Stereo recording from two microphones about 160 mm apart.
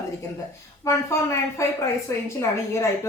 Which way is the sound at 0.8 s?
20° left (ahead or behind).